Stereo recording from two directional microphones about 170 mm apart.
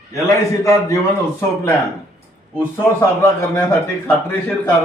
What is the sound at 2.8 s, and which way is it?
Speech, 5° left (ahead or behind).